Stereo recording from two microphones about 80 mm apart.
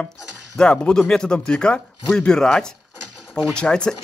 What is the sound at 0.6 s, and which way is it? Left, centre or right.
Speech, centre.